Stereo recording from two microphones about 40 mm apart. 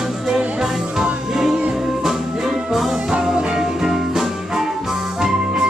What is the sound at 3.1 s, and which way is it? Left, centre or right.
Music, right.